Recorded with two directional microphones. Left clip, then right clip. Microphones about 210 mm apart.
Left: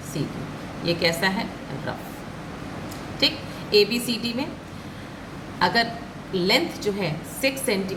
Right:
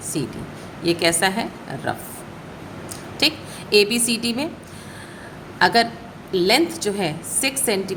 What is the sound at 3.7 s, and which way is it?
Speech, 60° right (ahead or behind).